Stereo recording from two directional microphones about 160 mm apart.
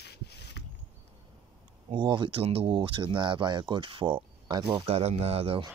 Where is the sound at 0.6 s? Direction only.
90° left.